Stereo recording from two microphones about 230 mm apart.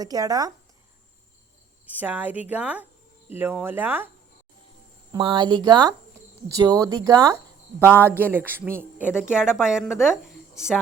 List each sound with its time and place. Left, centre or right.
0.0 s speech: centre
2.0 s speech: centre
5.1 s speech: right; by 10.8 s centre